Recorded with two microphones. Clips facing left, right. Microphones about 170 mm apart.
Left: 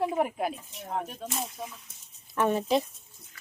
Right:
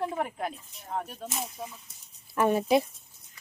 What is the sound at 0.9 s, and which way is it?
Speech, centre (ahead or behind).